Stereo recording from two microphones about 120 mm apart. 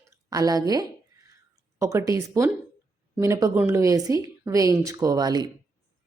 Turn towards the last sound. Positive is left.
turn(degrees=-35)  # may be behind; listen again after turning